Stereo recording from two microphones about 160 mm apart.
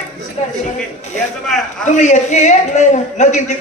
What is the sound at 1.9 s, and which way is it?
A man's voice, 50° left (ahead or behind).